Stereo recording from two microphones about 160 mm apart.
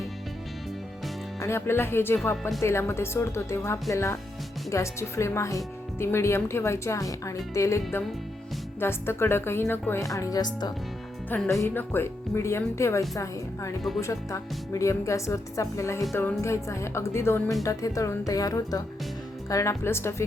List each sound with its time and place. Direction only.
1.4 s speech: 15° left (ahead or behind)
2.3 s speech: 5° left (ahead or behind)
2.6 s speech: 15° left (ahead or behind)
8.8 s speech: 15° left (ahead or behind)
11.3 s a woman's voice: 5° left (ahead or behind)